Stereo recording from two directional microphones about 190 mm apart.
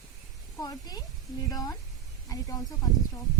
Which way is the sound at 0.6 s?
20° left (ahead or behind).